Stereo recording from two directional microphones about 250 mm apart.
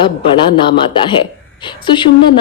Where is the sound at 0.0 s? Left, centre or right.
Centre.